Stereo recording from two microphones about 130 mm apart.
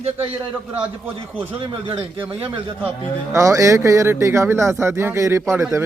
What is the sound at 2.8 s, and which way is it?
Speech, 25° right (ahead or behind).